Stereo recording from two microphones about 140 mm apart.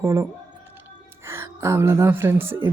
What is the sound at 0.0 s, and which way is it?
Speech, 20° right (ahead or behind).